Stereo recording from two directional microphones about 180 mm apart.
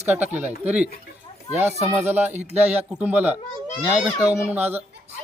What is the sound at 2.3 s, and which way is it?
Speech, 35° right (ahead or behind).